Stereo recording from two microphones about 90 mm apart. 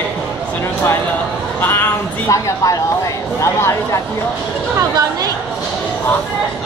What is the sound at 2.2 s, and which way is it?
Speech, 40° left (ahead or behind).